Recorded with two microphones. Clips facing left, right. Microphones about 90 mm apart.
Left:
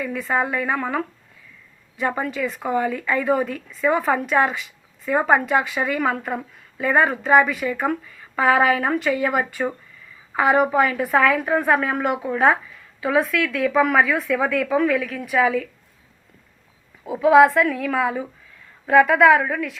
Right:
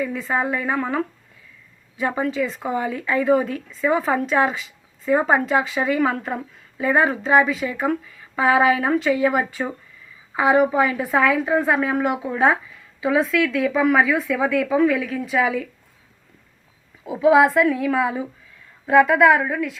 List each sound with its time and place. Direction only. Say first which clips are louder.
0.0 s a woman's voice: even; 15° right (ahead or behind)
5.0 s a woman's voice: even; 15° right (ahead or behind)
6.1 s a woman's voice: even; 5° left (ahead or behind)
6.7 s a woman's voice: even; 10° right (ahead or behind)
17.1 s a woman's voice: left 2 dB; 15° right (ahead or behind)